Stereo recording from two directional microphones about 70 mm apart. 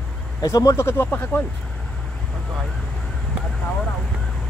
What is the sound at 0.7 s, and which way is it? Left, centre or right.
Speech, left.